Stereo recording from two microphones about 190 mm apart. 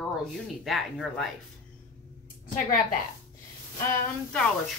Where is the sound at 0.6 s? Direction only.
Centre (ahead or behind).